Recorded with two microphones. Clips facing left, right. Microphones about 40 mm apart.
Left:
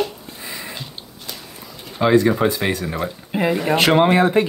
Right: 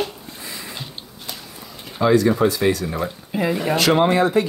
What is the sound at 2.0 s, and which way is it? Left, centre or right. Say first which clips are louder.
Speech: left 1 dB; left.